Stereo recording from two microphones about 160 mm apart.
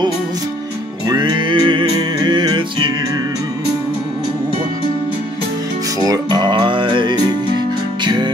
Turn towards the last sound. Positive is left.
turn(degrees=-30)  # may be behind; listen again after turning